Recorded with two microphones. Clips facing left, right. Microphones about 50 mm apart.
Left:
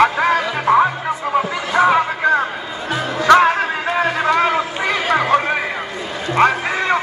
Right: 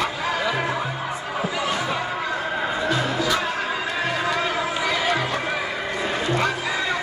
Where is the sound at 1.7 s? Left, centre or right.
Left.